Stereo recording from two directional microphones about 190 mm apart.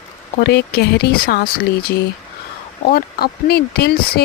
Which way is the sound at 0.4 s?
60° left (ahead or behind).